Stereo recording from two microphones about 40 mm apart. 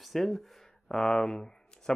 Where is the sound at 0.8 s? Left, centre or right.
Centre.